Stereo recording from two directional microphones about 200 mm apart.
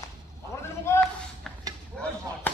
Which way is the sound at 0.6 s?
10° left (ahead or behind).